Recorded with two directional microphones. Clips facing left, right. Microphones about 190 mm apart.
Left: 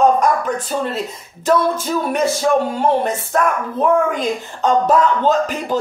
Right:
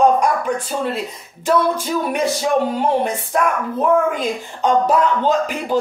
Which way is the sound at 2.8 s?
10° right (ahead or behind).